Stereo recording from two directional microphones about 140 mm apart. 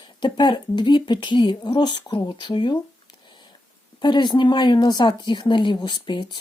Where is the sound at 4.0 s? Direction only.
35° left (ahead or behind).